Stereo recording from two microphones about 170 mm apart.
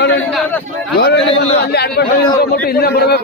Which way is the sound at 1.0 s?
80° left.